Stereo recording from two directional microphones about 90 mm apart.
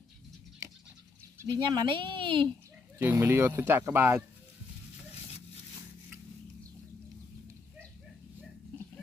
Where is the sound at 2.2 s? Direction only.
65° right (ahead or behind).